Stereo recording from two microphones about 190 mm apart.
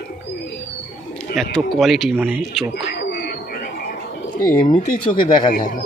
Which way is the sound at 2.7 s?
60° left (ahead or behind).